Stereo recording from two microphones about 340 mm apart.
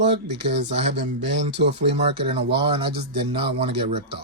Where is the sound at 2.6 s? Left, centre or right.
Centre.